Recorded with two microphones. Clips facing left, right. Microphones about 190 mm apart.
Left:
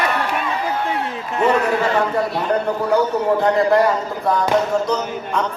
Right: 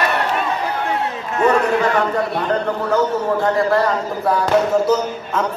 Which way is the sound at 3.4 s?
20° left (ahead or behind).